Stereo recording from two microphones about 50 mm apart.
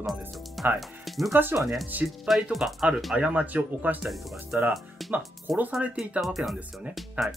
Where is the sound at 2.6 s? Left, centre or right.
Right.